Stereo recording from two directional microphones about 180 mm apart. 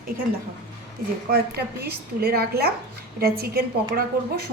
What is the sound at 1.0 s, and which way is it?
A woman's voice, 55° right (ahead or behind).